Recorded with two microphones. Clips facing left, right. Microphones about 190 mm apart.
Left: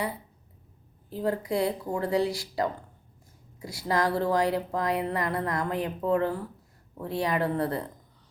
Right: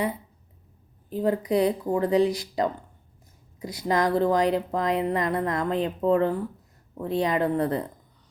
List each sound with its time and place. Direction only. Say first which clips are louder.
1.1 s speech: right 4 dB; 20° right (ahead or behind)